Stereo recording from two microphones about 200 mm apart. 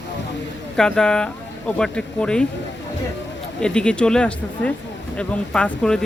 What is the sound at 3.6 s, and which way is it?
Speech, 5° left (ahead or behind).